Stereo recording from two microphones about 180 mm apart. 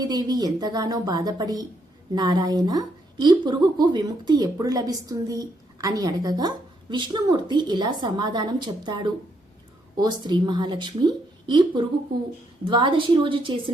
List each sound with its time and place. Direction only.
0.0 s a woman's voice: 20° right (ahead or behind)